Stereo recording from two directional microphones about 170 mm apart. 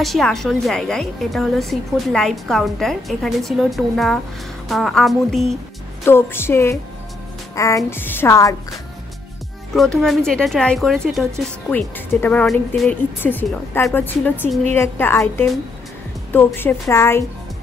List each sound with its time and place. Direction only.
0.0 s a woman's voice: centre (ahead or behind)
6.0 s speech: 15° left (ahead or behind)
9.8 s a woman's voice: centre (ahead or behind)